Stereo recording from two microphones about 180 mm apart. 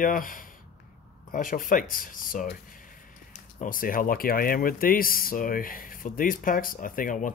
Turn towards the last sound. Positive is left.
turn(degrees=45)  # may be behind; listen again after turning